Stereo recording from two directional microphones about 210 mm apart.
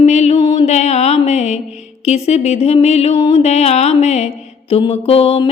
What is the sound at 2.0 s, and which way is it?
Speech, 30° left (ahead or behind).